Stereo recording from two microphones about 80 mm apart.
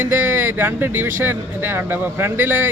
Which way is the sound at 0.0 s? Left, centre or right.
Right.